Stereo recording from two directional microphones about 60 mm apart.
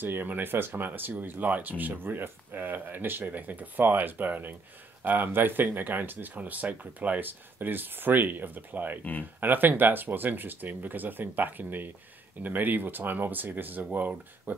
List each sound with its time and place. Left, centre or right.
0.0 s speech: right